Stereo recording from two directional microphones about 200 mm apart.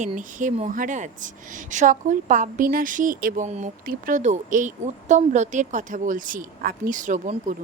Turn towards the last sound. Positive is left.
turn(degrees=-40)  # may be behind; listen again after turning